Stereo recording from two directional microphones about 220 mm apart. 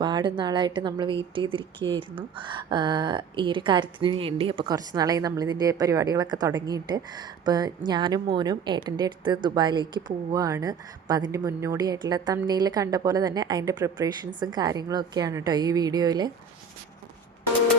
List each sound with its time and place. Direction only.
0.0 s a woman's voice: 20° right (ahead or behind)